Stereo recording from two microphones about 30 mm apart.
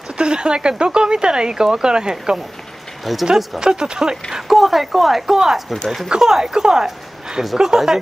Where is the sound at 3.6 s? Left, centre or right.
Right.